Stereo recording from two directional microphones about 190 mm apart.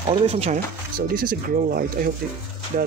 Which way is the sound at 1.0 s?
50° right (ahead or behind).